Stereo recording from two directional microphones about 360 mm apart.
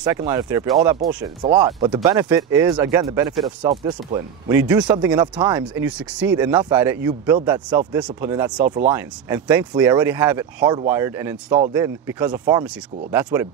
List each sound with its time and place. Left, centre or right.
0.0 s speech: centre
8.6 s speech: centre
8.9 s speech: centre